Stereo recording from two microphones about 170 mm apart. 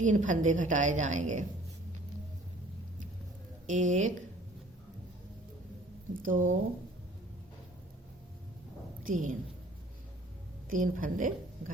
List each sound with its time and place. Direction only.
0.0 s a woman's voice: 45° right (ahead or behind)
3.7 s a woman's voice: 45° right (ahead or behind)
6.2 s a woman's voice: 50° right (ahead or behind)
9.0 s a woman's voice: 50° right (ahead or behind)
10.7 s a woman's voice: 50° right (ahead or behind)